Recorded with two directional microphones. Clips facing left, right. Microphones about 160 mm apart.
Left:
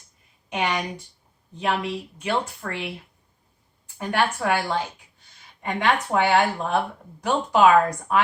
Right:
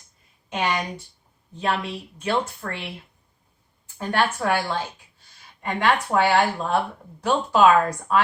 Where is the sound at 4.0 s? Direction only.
15° left (ahead or behind).